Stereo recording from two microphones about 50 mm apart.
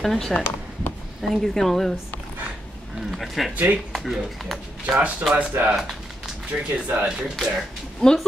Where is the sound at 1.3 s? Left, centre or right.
Centre.